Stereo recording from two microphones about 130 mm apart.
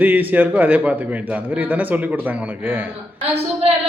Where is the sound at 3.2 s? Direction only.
50° right (ahead or behind).